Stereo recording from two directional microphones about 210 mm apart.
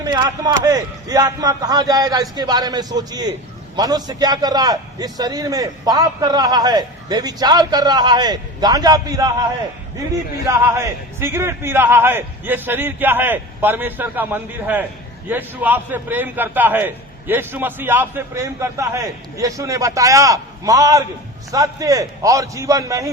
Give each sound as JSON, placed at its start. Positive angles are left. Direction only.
{"t": 0.0, "sound": "a man's voice", "side_deg": -20}
{"t": 10.4, "sound": "a man's voice", "side_deg": -15}